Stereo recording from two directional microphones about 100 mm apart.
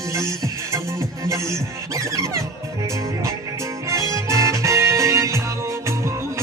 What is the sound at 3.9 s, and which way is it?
Music, 30° right (ahead or behind).